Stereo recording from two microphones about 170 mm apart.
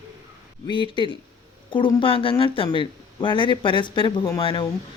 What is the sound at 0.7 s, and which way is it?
Speech, 30° left (ahead or behind).